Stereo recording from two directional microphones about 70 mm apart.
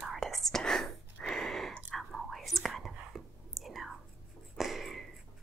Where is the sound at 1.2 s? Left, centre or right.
Centre.